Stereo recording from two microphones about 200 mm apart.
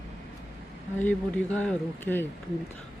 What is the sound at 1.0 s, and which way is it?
Speech, 10° left (ahead or behind).